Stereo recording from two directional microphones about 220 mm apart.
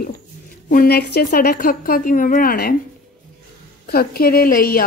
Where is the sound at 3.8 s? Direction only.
45° left (ahead or behind).